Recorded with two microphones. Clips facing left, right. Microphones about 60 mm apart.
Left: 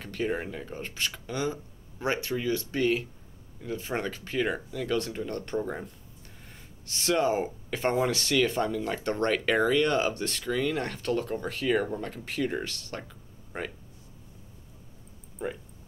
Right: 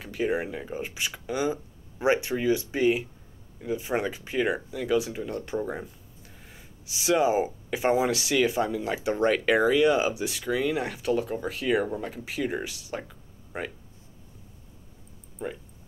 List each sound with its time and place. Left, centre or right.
0.0 s speech: centre
15.4 s speech: centre